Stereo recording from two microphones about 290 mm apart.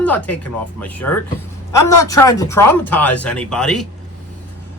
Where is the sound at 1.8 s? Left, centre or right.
Left.